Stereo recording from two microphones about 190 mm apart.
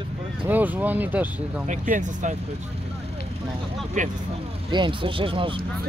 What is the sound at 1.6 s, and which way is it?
Speech, 45° right (ahead or behind).